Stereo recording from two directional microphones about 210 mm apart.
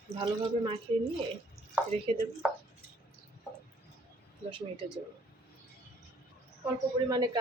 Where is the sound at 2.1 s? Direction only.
25° right (ahead or behind).